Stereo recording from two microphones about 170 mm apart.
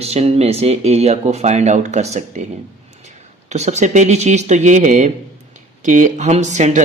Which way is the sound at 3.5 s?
45° right (ahead or behind).